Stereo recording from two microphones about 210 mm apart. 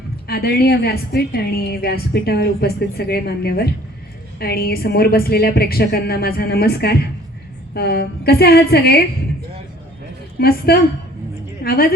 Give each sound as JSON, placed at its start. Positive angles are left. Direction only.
{"t": 0.3, "sound": "a woman's voice", "side_deg": 50}
{"t": 10.7, "sound": "a woman's voice", "side_deg": 50}